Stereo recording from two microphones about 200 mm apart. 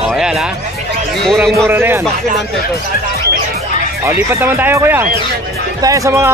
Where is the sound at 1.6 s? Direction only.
10° right (ahead or behind).